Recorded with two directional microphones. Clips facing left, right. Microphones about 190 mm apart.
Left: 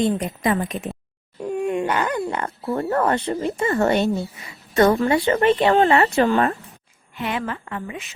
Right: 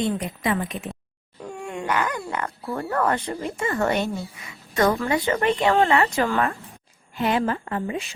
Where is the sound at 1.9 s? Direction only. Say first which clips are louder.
Left 3 dB; 30° left (ahead or behind).